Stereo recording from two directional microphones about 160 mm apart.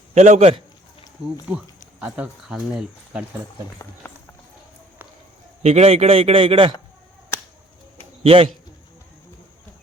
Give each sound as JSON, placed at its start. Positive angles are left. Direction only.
{"t": 0.1, "sound": "a man's voice", "side_deg": -45}
{"t": 1.5, "sound": "speech", "side_deg": -5}
{"t": 4.0, "sound": "run", "side_deg": 15}
{"t": 5.6, "sound": "a man's voice", "side_deg": -40}
{"t": 7.9, "sound": "a sound", "side_deg": -35}